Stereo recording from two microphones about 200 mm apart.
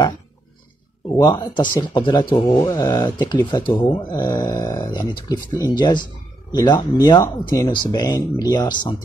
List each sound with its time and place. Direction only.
1.1 s speech: 20° left (ahead or behind)